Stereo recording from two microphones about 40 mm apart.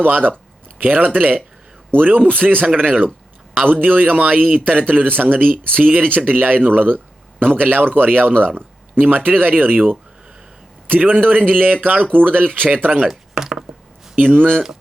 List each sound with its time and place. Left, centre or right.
0.0 s a man's voice: right
4.2 s speech: right
11.3 s speech: right
12.6 s speech: right
13.1 s chopping: centre
14.3 s speech: right